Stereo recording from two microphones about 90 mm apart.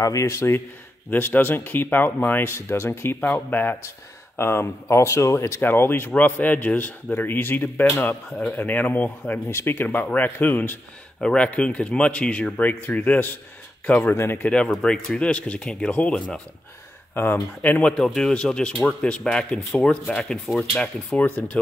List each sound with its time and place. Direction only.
0.0 s speech: 35° left (ahead or behind); by 14.1 s 15° left (ahead or behind)
14.1 s speech: 30° left (ahead or behind)
14.4 s speech: 10° left (ahead or behind)